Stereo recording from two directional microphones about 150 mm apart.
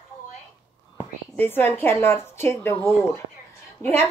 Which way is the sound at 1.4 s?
15° left (ahead or behind).